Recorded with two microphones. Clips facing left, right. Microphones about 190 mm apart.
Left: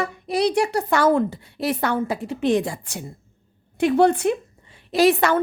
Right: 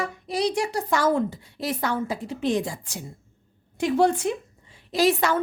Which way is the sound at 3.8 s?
60° left (ahead or behind).